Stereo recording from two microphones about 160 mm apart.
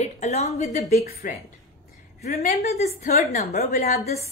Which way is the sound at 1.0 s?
70° left (ahead or behind).